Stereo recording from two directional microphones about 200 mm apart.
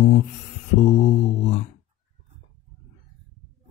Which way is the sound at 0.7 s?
40° left (ahead or behind).